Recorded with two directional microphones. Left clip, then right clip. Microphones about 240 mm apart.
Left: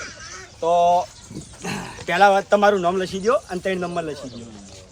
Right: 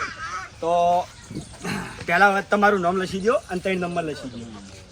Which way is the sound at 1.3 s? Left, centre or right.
Centre.